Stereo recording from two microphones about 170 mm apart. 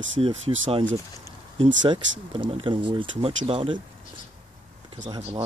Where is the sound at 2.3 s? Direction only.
30° right (ahead or behind).